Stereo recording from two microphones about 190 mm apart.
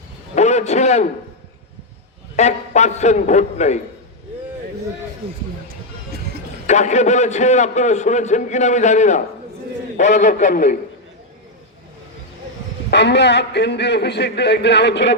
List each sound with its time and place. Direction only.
0.3 s a sound: 35° left (ahead or behind)
2.3 s a man's voice: 40° left (ahead or behind)
5.2 s speech: 30° right (ahead or behind)
6.7 s a man's voice: 40° left (ahead or behind)
12.9 s a man's voice: 65° left (ahead or behind)